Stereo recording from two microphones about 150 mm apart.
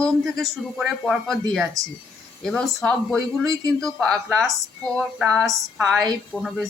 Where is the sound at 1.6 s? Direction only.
20° right (ahead or behind).